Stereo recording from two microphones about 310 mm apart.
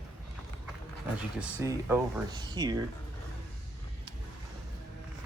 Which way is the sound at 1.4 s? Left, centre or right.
Centre.